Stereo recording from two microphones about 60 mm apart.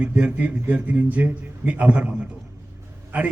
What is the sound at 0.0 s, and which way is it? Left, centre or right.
A man's voice, right.